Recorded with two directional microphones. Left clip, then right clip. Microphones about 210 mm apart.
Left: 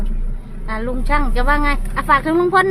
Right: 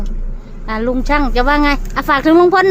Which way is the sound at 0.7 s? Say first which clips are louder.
Right 5 dB; 30° right (ahead or behind).